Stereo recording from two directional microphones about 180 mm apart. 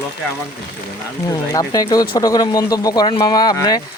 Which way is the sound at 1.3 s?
20° left (ahead or behind).